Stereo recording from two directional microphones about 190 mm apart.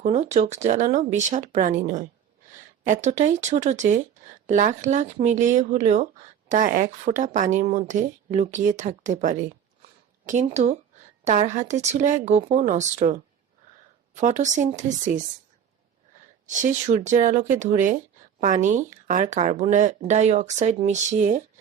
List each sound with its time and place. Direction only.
0.0 s a woman's voice: 35° right (ahead or behind)
14.2 s a woman's voice: 40° right (ahead or behind)
16.5 s a woman's voice: 40° right (ahead or behind)